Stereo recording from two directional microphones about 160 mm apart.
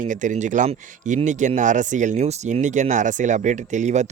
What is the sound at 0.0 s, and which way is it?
Speech, 50° right (ahead or behind).